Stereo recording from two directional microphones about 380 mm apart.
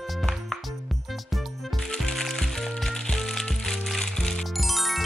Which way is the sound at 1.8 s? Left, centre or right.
Centre.